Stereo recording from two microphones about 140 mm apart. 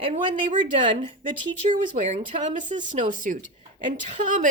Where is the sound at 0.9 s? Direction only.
35° right (ahead or behind).